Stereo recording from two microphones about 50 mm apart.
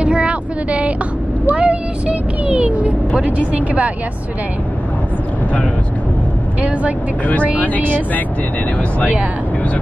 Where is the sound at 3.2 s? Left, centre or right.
Right.